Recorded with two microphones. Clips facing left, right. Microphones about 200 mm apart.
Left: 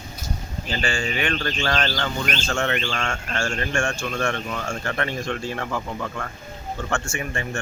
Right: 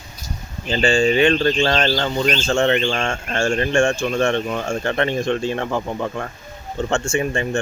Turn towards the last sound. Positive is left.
turn(degrees=-25)  # may be behind; listen again after turning